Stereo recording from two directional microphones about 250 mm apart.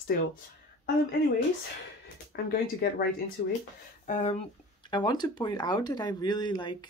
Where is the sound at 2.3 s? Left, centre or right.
Left.